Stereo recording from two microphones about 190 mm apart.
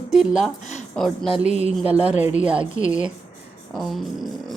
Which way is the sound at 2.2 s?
40° left (ahead or behind).